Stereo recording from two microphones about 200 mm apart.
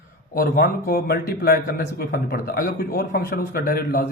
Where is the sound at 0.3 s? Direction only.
45° left (ahead or behind).